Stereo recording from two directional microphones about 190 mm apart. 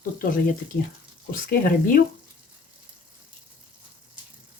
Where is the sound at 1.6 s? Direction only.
50° left (ahead or behind).